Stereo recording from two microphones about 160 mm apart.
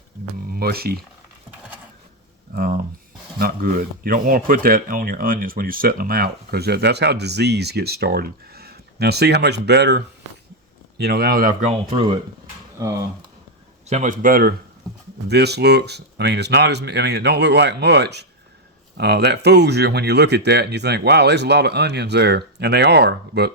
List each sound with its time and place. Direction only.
0.3 s a sound: 75° right (ahead or behind)
2.6 s speech: 65° right (ahead or behind)
11.9 s speech: 30° right (ahead or behind)
13.9 s speech: 55° right (ahead or behind)
15.3 s speech: 90° right